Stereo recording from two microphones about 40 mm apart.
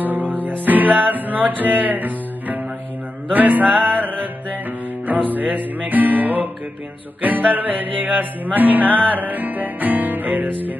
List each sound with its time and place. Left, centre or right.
0.0 s music: right